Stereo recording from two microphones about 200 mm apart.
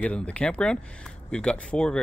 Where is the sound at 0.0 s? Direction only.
5° left (ahead or behind).